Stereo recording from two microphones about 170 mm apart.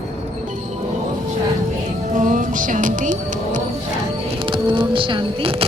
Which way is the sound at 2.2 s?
50° right (ahead or behind).